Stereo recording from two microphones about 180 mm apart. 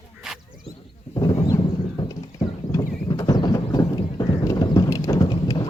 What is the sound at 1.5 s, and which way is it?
Clip-clop, 25° left (ahead or behind).